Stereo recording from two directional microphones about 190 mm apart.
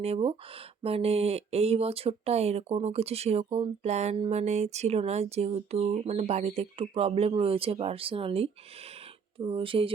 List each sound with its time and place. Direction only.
0.0 s speech: 30° right (ahead or behind)